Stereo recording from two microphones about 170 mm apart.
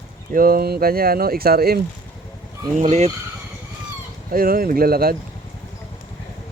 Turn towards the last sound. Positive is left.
turn(degrees=-60)  # may be behind; listen again after turning